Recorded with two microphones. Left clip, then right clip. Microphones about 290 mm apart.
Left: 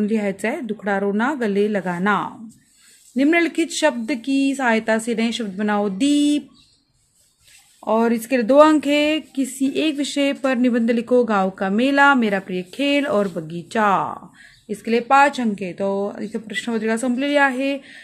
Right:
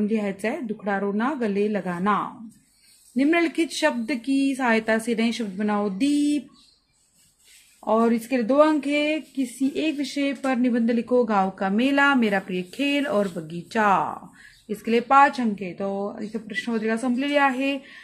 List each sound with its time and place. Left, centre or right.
0.0 s a woman's voice: left
7.8 s speech: left